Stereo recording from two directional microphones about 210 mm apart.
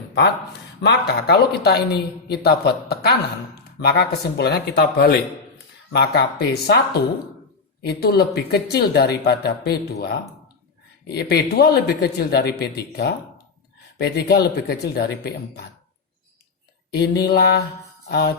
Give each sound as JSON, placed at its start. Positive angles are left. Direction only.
{"t": 0.8, "sound": "speech", "side_deg": 55}
{"t": 16.9, "sound": "speech", "side_deg": 50}